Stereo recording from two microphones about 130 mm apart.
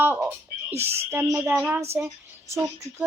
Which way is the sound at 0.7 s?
50° right (ahead or behind).